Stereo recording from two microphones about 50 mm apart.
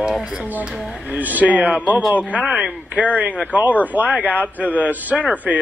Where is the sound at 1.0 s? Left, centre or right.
Right.